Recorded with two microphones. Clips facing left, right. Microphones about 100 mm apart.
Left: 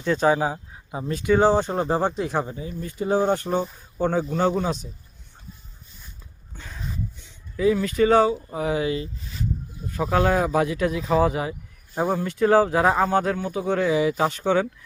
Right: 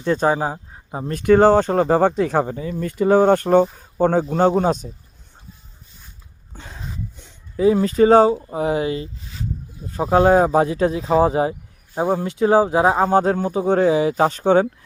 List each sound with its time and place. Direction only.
0.0 s speech: 35° right (ahead or behind)
1.0 s speech: 50° right (ahead or behind)
6.5 s a sound: 30° right (ahead or behind)
7.2 s speech: 40° right (ahead or behind)